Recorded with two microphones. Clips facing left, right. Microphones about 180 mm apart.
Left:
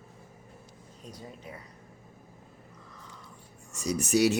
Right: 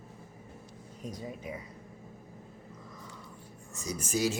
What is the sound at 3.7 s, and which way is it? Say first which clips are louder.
Speech: left 7 dB; 75° left (ahead or behind).